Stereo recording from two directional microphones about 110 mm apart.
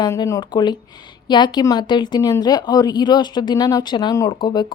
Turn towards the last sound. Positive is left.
turn(degrees=45)  # may be behind; listen again after turning